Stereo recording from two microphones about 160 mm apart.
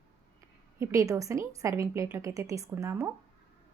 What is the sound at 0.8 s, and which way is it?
A woman's voice, 20° right (ahead or behind).